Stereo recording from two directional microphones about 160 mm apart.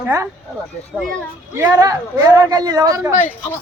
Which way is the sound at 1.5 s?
20° right (ahead or behind).